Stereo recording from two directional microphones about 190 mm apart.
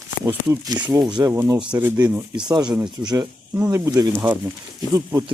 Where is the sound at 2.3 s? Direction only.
25° right (ahead or behind).